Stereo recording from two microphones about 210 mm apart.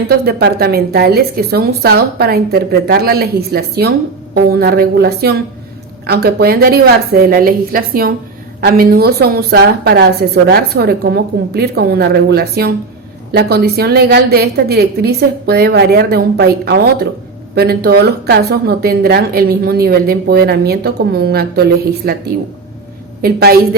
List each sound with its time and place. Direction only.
0.1 s speech: 45° right (ahead or behind)
23.2 s speech: 45° right (ahead or behind)